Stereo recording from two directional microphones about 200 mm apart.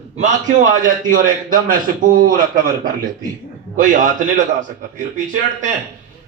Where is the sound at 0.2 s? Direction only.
35° right (ahead or behind).